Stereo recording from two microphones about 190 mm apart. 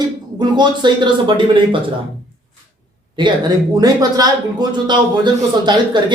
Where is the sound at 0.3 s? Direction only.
25° right (ahead or behind).